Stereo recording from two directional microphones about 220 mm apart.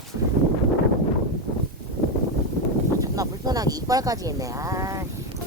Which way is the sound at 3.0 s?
15° right (ahead or behind).